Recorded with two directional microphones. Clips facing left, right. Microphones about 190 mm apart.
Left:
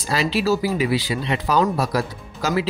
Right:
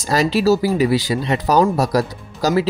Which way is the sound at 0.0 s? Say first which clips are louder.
Right 5 dB; 40° right (ahead or behind).